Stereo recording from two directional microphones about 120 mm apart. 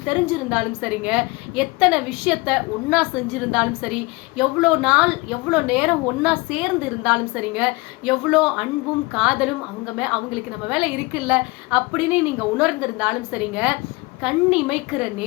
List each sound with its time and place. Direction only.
0.0 s a woman's voice: 10° right (ahead or behind)